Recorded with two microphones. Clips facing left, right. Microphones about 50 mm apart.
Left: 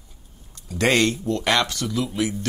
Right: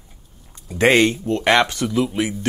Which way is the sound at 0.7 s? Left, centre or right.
Right.